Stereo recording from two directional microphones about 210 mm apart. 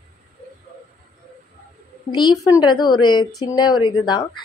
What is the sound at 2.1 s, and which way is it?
Speech, 20° left (ahead or behind).